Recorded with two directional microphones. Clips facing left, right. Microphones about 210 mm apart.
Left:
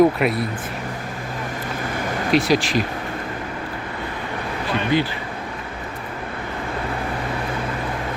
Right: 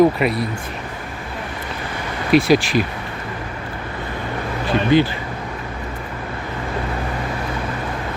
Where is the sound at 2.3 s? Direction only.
10° right (ahead or behind).